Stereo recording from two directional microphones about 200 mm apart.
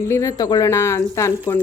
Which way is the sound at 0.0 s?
15° left (ahead or behind).